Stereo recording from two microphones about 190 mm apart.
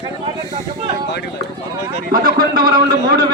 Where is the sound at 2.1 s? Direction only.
45° right (ahead or behind).